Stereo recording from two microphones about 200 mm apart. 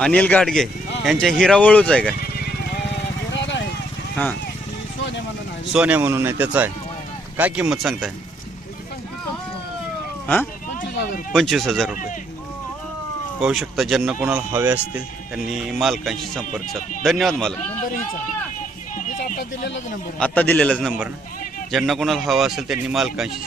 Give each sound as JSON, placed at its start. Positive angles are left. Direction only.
{"t": 0.0, "sound": "speech", "side_deg": 5}
{"t": 3.3, "sound": "vehicle", "side_deg": 65}
{"t": 5.7, "sound": "speech", "side_deg": -5}
{"t": 11.3, "sound": "speech", "side_deg": 0}
{"t": 13.4, "sound": "speech", "side_deg": 0}
{"t": 18.9, "sound": "a sound", "side_deg": 40}
{"t": 20.1, "sound": "speech", "side_deg": 5}